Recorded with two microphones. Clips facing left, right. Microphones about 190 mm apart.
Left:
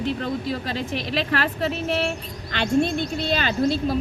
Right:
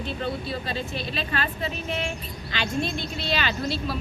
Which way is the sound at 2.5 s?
60° left (ahead or behind).